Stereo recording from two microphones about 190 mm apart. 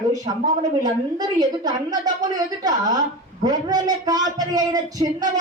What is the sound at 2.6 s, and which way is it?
A man's voice, 20° right (ahead or behind).